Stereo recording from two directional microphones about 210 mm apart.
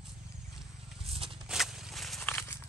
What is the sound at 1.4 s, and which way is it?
Walk, 5° right (ahead or behind).